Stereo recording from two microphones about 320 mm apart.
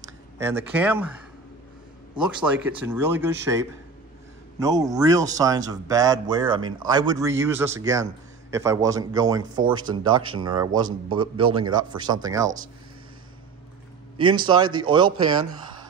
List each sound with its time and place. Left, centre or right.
0.4 s speech: centre
2.1 s speech: centre
14.1 s speech: centre